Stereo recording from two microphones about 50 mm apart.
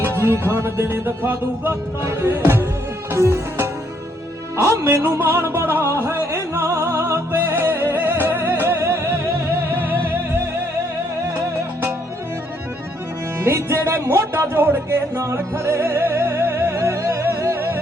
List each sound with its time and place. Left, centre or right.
0.0 s music: right
3.2 s music: right
5.2 s music: right
13.4 s music: right
15.2 s music: right
16.7 s music: right